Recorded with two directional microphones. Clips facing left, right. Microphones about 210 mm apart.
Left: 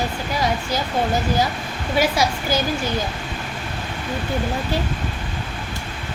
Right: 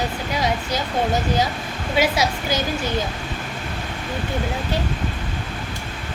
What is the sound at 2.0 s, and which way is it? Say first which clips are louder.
Speech: even; 20° right (ahead or behind).